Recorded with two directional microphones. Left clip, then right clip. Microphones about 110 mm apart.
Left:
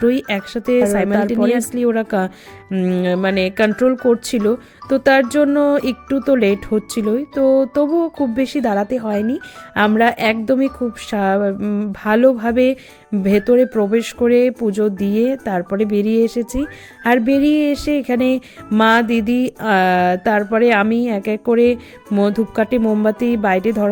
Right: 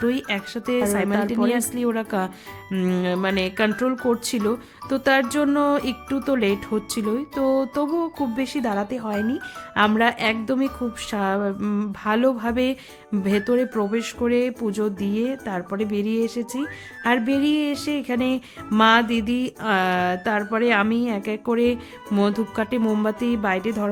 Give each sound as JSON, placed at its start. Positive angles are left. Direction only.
{"t": 0.0, "sound": "speech", "side_deg": 30}
{"t": 2.6, "sound": "speech", "side_deg": 15}
{"t": 3.0, "sound": "speech", "side_deg": 30}
{"t": 5.5, "sound": "speech", "side_deg": 20}
{"t": 5.8, "sound": "speech", "side_deg": 30}
{"t": 11.6, "sound": "speech", "side_deg": 15}
{"t": 12.0, "sound": "speech", "side_deg": 35}